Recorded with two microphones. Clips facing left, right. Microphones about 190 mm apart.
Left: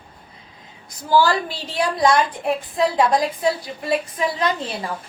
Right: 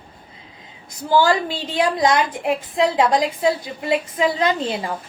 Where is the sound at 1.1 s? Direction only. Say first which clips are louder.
Right 1 dB; 25° right (ahead or behind).